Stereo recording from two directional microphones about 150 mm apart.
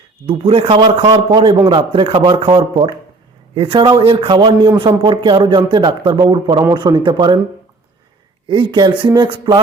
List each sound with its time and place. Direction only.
0.3 s a man's voice: 35° right (ahead or behind)
8.4 s a man's voice: 30° right (ahead or behind)